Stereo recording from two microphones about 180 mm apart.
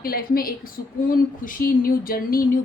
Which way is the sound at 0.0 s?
55° left (ahead or behind).